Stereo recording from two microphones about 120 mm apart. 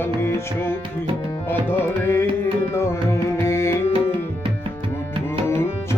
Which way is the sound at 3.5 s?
20° left (ahead or behind).